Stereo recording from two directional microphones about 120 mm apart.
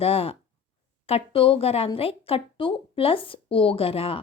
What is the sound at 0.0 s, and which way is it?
A woman's voice, 55° left (ahead or behind).